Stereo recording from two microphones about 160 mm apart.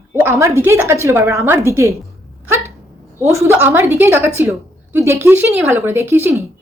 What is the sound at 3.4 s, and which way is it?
A woman's voice, 15° right (ahead or behind).